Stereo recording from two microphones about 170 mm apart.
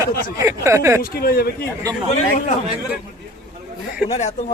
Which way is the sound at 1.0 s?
60° left (ahead or behind).